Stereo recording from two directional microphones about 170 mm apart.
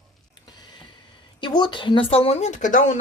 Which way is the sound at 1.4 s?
25° left (ahead or behind).